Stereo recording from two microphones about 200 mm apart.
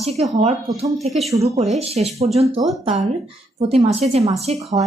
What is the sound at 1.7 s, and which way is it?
Speech, 30° right (ahead or behind).